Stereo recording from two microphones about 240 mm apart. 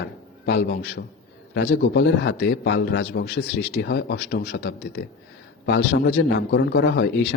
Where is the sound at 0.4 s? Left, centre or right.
Left.